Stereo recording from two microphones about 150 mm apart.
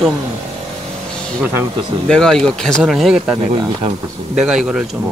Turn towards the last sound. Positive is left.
turn(degrees=-5)  # may be behind; listen again after turning